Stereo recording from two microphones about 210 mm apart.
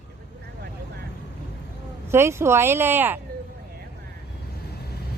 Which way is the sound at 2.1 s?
10° right (ahead or behind).